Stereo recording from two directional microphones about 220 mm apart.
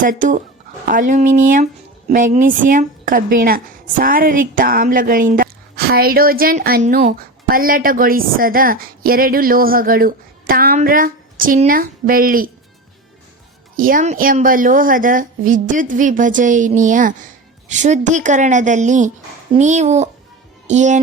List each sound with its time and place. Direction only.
0.0 s speech: 35° right (ahead or behind)
13.7 s speech: 40° right (ahead or behind)